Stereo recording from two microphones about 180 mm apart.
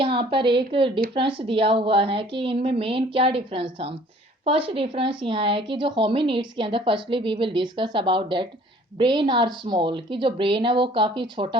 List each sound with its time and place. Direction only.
0.0 s a woman's voice: 30° right (ahead or behind)